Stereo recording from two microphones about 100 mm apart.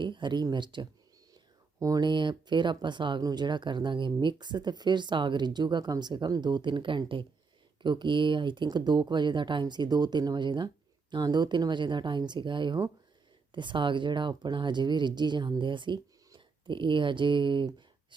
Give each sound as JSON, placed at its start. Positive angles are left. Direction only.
{"t": 0.0, "sound": "speech", "side_deg": -50}
{"t": 1.8, "sound": "speech", "side_deg": -35}
{"t": 2.0, "sound": "speech", "side_deg": -50}